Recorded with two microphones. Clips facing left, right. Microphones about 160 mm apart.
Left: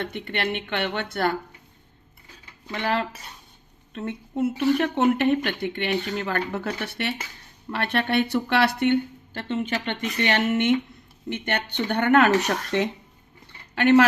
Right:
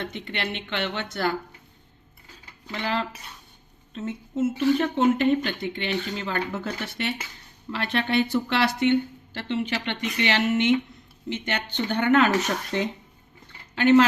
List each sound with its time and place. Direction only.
0.0 s speech: 55° left (ahead or behind)
2.7 s speech: 55° left (ahead or behind)